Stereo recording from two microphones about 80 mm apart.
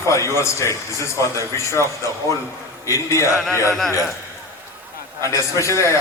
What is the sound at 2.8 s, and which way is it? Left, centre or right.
Speech, left.